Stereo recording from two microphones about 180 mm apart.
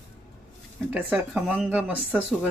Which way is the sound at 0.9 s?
10° right (ahead or behind).